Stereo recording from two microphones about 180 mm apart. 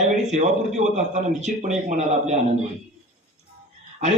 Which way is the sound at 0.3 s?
40° right (ahead or behind).